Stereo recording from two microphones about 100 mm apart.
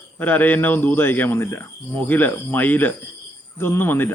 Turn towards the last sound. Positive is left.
turn(degrees=20)  # may be behind; listen again after turning